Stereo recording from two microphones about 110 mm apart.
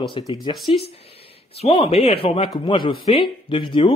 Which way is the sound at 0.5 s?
Centre (ahead or behind).